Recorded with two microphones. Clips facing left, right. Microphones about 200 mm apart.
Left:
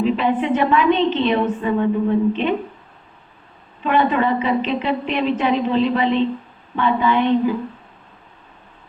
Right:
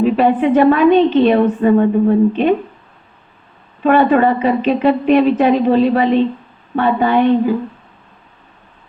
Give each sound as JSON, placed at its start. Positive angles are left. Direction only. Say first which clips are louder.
{"t": 0.0, "sound": "a woman's voice", "louder": "right 6 dB", "side_deg": -50}
{"t": 3.8, "sound": "a woman's voice", "louder": "right 6 dB", "side_deg": -45}